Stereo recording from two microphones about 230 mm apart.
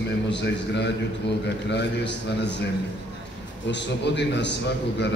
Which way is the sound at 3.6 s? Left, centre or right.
Left.